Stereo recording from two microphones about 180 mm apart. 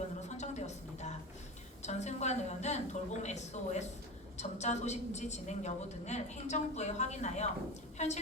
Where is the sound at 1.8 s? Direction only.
40° left (ahead or behind).